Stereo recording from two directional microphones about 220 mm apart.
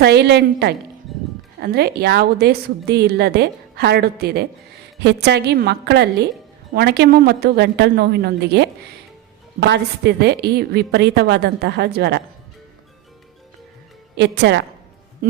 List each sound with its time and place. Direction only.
0.0 s a woman's voice: 50° right (ahead or behind)
14.2 s a woman's voice: 50° right (ahead or behind)